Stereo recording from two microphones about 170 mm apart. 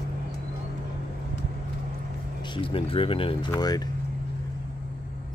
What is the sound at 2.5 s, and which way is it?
Speech, 30° left (ahead or behind).